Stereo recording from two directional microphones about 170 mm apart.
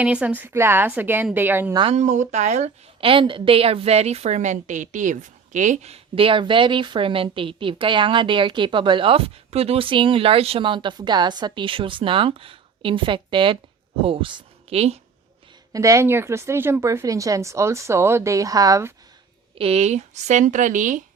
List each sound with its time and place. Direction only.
0.0 s speech: 5° right (ahead or behind)
1.7 s speech: 30° right (ahead or behind)
2.0 s a woman's voice: 45° right (ahead or behind)
15.7 s speech: 20° right (ahead or behind)
19.5 s speech: 35° right (ahead or behind)